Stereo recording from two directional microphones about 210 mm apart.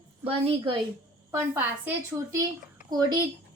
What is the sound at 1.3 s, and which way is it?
A woman's voice, 10° right (ahead or behind).